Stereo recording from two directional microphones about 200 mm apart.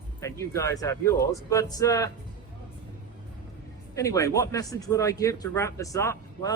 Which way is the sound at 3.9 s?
15° left (ahead or behind).